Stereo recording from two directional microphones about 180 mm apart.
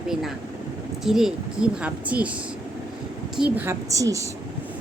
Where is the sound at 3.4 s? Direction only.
10° right (ahead or behind).